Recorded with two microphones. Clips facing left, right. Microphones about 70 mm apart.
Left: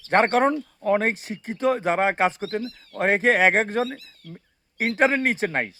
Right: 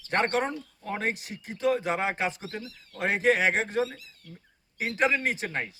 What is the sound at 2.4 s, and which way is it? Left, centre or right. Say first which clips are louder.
Speech: left 10 dB; left.